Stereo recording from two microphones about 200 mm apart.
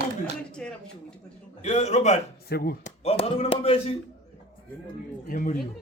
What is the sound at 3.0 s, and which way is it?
Speech, 30° left (ahead or behind).